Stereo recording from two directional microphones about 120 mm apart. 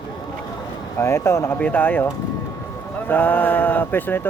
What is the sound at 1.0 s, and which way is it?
Speech, 20° left (ahead or behind).